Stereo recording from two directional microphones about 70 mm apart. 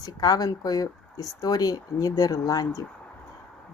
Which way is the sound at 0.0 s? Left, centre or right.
Left.